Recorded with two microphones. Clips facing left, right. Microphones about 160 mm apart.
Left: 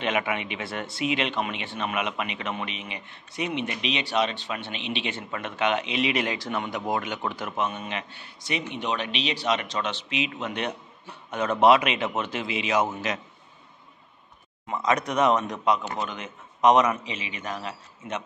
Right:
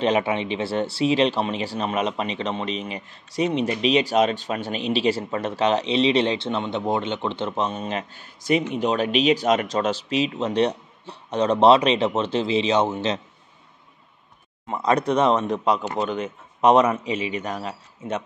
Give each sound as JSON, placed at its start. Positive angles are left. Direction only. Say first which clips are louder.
{"t": 0.0, "sound": "speech", "louder": "right 6 dB", "side_deg": -30}
{"t": 14.7, "sound": "speech", "louder": "right 5 dB", "side_deg": -30}